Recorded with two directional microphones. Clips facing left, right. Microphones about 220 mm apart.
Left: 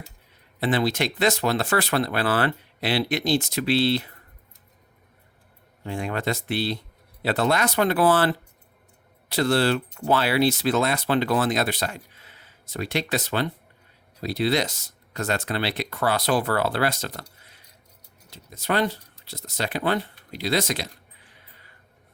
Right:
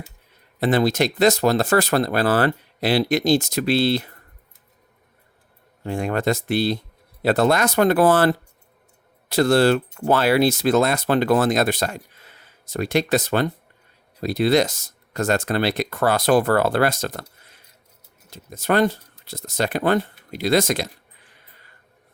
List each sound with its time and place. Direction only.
0.6 s speech: 45° right (ahead or behind)
5.8 s speech: 45° right (ahead or behind)
18.3 s speech: 50° right (ahead or behind)